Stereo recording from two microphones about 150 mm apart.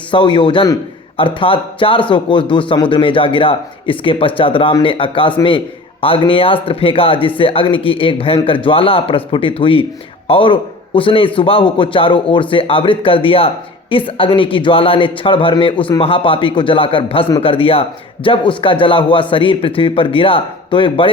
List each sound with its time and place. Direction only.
0.1 s a man's voice: 35° left (ahead or behind)